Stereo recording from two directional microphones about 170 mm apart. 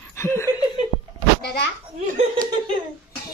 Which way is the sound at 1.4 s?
70° left (ahead or behind).